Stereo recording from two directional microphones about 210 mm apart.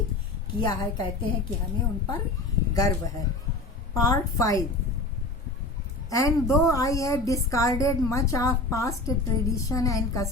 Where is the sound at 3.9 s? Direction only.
15° left (ahead or behind).